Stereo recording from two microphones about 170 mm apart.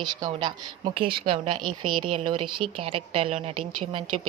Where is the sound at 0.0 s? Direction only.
25° right (ahead or behind).